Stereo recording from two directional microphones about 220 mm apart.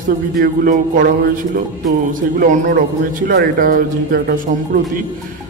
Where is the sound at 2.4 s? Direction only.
40° right (ahead or behind).